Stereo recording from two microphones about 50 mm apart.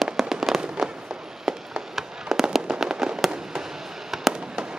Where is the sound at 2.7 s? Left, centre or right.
Centre.